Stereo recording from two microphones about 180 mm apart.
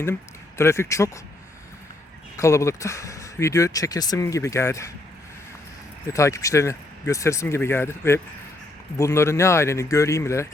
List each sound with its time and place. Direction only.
0.0 s speech: 15° left (ahead or behind)
2.4 s speech: 15° left (ahead or behind)
6.1 s speech: 15° left (ahead or behind)